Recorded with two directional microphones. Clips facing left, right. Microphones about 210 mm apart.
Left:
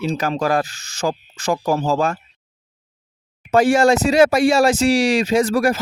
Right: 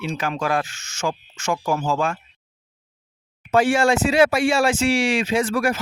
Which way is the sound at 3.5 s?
40° left (ahead or behind).